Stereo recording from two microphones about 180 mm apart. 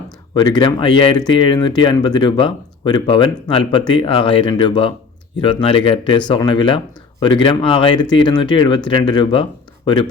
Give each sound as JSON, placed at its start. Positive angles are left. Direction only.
{"t": 0.3, "sound": "speech", "side_deg": 25}